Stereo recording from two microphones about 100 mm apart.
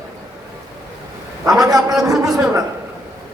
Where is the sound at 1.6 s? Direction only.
5° right (ahead or behind).